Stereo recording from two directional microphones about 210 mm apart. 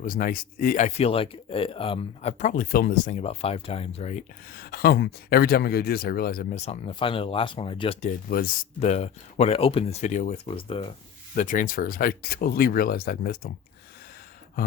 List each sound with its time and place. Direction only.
0.0 s speech: 40° left (ahead or behind)
4.4 s speech: 45° left (ahead or behind); by 10.8 s 25° left (ahead or behind)
11.3 s speech: 40° left (ahead or behind)